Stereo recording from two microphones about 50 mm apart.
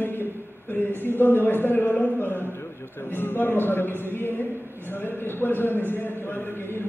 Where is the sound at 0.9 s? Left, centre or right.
Left.